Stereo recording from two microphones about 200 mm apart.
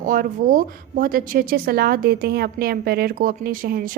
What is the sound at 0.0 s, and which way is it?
A woman's voice, 45° right (ahead or behind).